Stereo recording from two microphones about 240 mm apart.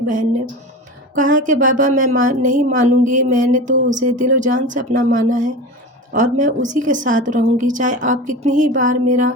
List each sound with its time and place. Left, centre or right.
1.1 s a woman's voice: right